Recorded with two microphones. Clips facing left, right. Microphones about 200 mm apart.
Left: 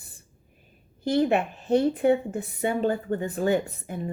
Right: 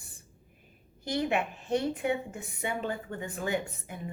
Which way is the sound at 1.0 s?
35° left (ahead or behind).